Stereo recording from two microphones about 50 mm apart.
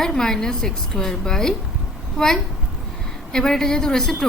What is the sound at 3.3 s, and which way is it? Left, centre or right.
Speech, centre.